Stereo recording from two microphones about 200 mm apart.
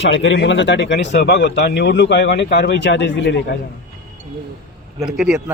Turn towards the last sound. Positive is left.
turn(degrees=-5)  # may be behind; listen again after turning